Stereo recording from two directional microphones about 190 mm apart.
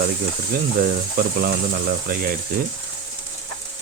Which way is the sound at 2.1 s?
50° right (ahead or behind).